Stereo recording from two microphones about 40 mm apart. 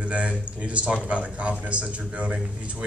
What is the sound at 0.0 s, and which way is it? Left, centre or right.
Speech, right.